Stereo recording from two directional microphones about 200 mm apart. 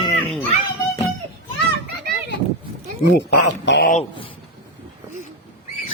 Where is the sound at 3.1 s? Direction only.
60° left (ahead or behind).